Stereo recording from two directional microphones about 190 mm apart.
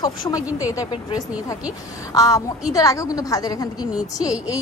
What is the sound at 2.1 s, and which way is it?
A woman's voice, 20° left (ahead or behind).